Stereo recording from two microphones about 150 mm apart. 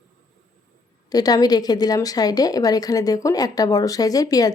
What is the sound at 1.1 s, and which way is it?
A woman's voice, 25° left (ahead or behind).